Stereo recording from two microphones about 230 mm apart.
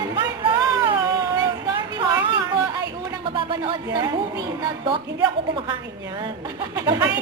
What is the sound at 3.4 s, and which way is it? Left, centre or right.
Speech, right.